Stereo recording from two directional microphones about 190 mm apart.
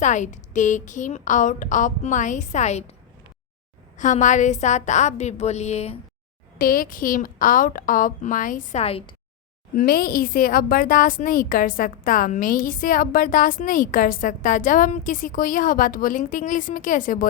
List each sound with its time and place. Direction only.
0.0 s a woman's voice: 40° left (ahead or behind)
3.9 s a woman's voice: 40° left (ahead or behind)
6.6 s a woman's voice: 50° left (ahead or behind); by 9.1 s 30° left (ahead or behind)
9.7 s a woman's voice: 50° left (ahead or behind)